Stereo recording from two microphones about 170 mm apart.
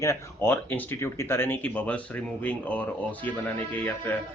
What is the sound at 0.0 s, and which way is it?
A man's voice, 15° left (ahead or behind).